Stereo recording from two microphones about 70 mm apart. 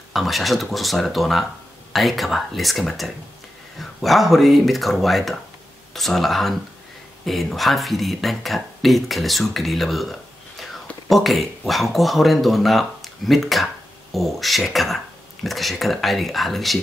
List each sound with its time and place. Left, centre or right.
0.1 s speech: centre